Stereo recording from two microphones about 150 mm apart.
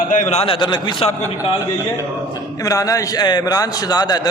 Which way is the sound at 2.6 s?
25° left (ahead or behind).